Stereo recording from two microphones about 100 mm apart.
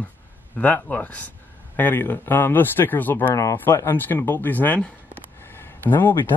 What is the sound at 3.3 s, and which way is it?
Speech, 35° left (ahead or behind).